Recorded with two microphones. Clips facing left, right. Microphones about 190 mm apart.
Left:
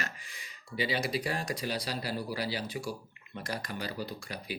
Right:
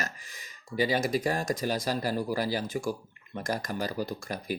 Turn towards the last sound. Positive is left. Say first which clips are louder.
# right 5 dB
turn(degrees=-45)  # may be behind; listen again after turning